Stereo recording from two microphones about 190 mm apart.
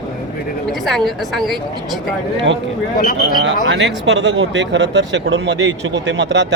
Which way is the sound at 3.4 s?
70° right (ahead or behind).